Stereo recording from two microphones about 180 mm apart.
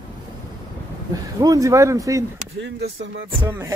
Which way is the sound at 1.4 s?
20° right (ahead or behind).